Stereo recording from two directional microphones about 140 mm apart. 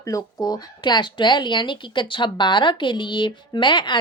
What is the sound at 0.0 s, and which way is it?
A woman's voice, 20° left (ahead or behind).